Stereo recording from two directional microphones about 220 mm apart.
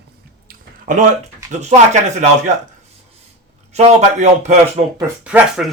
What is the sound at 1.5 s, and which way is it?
Speech, 30° right (ahead or behind).